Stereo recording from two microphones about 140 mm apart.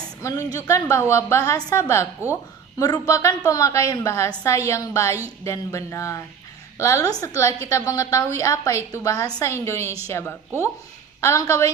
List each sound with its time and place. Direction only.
0.2 s a woman's voice: 25° left (ahead or behind)